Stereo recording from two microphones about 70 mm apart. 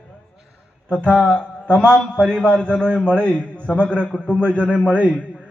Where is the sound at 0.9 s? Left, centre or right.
Centre.